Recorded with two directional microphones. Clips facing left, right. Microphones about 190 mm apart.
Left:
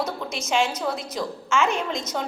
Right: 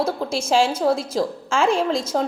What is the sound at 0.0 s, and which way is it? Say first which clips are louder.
A woman's voice: right 6 dB; 30° right (ahead or behind).